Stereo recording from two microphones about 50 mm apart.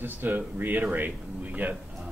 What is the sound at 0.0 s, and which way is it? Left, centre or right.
Speech, right.